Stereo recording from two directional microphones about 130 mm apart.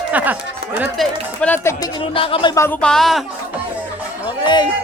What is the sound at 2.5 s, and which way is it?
Speech, 20° left (ahead or behind).